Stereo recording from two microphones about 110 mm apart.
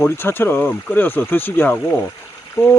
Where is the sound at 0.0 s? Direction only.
20° left (ahead or behind).